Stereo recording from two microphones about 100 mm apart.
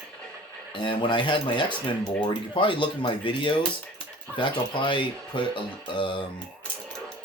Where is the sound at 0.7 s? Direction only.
55° left (ahead or behind).